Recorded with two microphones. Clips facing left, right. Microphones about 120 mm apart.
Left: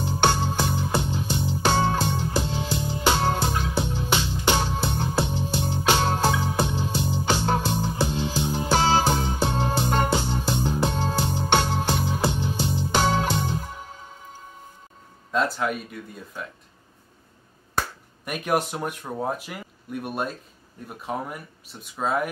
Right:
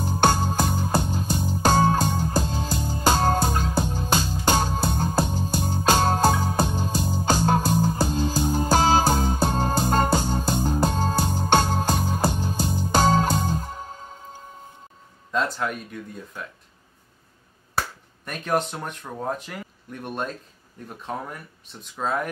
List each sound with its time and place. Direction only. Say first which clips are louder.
0.2 s music: right 2 dB; 40° right (ahead or behind)
15.3 s speech: left 1 dB; centre (ahead or behind)
18.2 s speech: even; 10° left (ahead or behind)